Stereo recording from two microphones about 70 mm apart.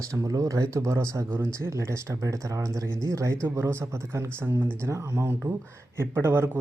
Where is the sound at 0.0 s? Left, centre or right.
Right.